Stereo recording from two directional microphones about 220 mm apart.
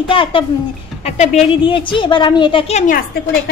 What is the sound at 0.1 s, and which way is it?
Speech, 25° left (ahead or behind).